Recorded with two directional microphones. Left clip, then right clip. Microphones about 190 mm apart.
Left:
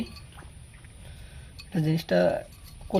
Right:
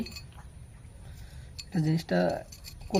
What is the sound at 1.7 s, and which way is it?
Speech, 20° left (ahead or behind).